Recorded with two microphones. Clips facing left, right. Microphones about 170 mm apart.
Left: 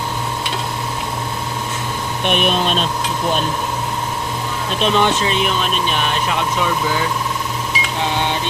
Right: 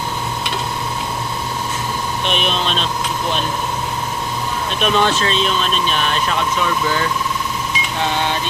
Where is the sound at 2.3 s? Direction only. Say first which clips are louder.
Left 4 dB; 50° left (ahead or behind).